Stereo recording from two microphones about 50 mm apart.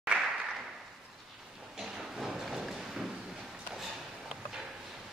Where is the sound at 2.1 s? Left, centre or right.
Centre.